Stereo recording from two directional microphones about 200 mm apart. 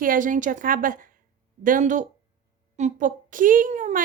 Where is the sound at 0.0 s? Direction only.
40° right (ahead or behind).